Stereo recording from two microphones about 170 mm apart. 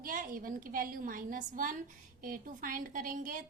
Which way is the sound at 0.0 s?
55° right (ahead or behind).